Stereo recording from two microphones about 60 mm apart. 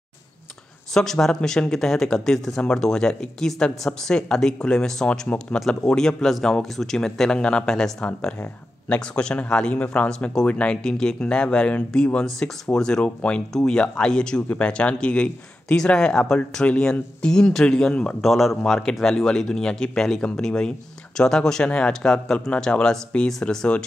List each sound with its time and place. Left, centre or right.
0.9 s speech: centre
18.2 s speech: centre